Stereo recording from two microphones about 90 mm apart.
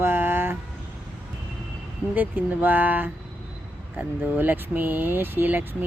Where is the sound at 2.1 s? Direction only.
20° right (ahead or behind).